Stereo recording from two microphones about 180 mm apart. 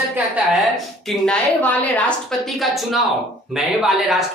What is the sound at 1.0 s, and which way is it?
A woman's voice, 5° left (ahead or behind).